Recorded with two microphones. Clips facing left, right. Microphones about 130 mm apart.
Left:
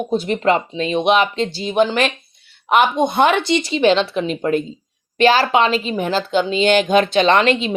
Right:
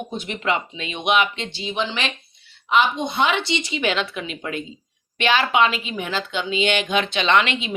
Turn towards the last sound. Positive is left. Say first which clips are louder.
# left 5 dB
turn(degrees=40)  # may be behind; listen again after turning